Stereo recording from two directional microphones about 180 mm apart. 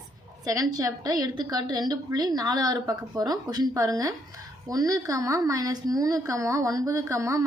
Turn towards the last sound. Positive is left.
turn(degrees=-15)  # may be behind; listen again after turning